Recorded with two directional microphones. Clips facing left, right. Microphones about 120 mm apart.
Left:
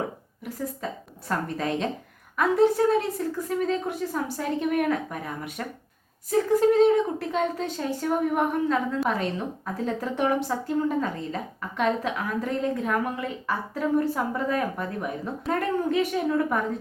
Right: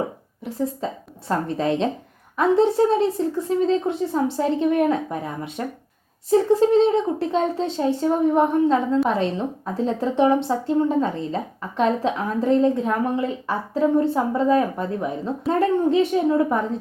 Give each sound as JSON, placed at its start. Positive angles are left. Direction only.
{"t": 0.4, "sound": "a woman's voice", "side_deg": -25}